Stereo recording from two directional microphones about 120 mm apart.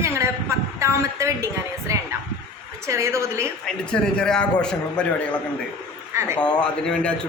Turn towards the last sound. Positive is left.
turn(degrees=10)  # may be behind; listen again after turning